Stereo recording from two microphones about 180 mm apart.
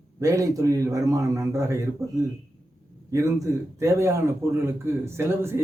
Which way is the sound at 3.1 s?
15° right (ahead or behind).